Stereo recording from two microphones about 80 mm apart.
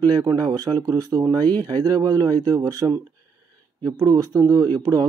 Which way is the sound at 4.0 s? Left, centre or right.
Right.